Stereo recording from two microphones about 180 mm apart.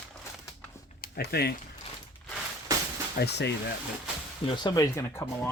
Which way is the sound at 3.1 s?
70° left (ahead or behind).